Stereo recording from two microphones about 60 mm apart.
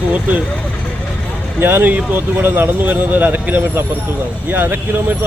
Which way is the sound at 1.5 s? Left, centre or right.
Right.